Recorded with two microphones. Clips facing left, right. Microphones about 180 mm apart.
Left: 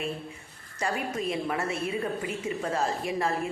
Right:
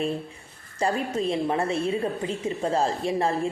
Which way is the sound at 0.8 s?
30° right (ahead or behind).